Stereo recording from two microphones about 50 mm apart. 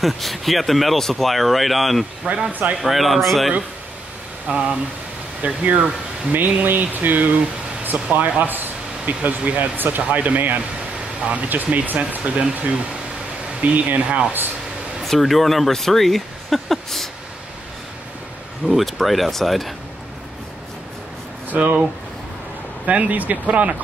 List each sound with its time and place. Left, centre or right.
0.0 s speech: centre
2.2 s speech: right
2.8 s speech: centre
4.5 s speech: right
15.0 s speech: centre
18.7 s speech: centre
21.5 s speech: right
22.8 s speech: right